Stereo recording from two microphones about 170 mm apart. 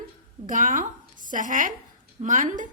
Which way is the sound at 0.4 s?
50° right (ahead or behind).